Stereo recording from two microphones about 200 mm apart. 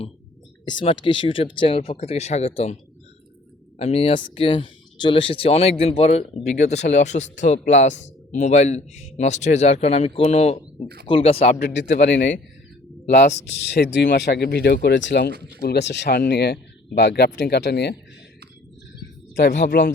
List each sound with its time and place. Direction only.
0.6 s speech: 25° left (ahead or behind)
3.8 s a man's voice: 30° left (ahead or behind)
11.7 s speech: 60° left (ahead or behind)
13.7 s speech: 55° left (ahead or behind)
19.4 s speech: 60° left (ahead or behind)